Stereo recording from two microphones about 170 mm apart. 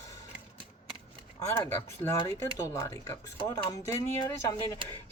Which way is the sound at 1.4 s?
20° left (ahead or behind).